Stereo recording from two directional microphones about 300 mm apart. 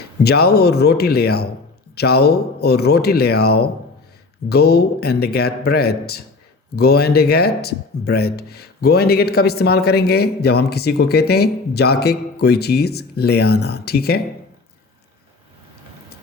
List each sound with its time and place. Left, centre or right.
0.2 s speech: left